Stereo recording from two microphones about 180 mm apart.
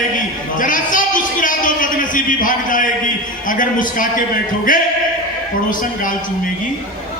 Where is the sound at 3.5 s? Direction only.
50° left (ahead or behind).